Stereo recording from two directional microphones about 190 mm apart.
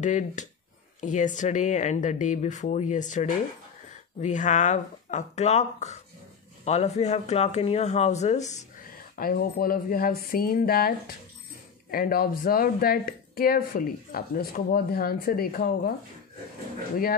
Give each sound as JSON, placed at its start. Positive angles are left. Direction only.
{"t": 0.0, "sound": "speech", "side_deg": 40}
{"t": 9.1, "sound": "speech", "side_deg": 50}